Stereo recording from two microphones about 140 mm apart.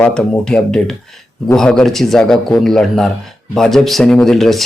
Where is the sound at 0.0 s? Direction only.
5° left (ahead or behind).